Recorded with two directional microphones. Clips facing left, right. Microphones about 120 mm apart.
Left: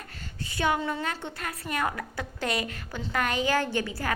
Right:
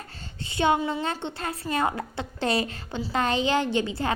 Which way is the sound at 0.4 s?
25° right (ahead or behind).